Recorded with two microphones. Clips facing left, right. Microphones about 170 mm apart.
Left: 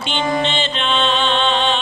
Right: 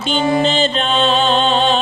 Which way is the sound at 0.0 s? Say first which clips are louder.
Right 4 dB; 40° right (ahead or behind).